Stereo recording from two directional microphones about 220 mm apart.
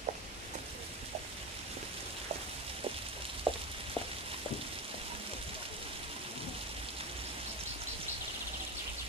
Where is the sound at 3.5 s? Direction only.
25° right (ahead or behind).